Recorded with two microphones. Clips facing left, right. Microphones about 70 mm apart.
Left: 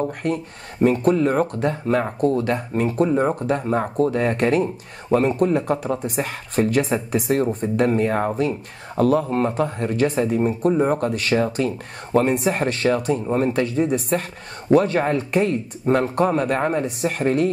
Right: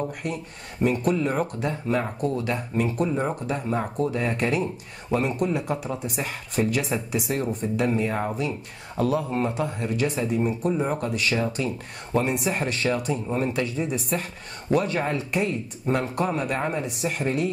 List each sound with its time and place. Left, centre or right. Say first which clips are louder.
0.2 s speech: left 7 dB; left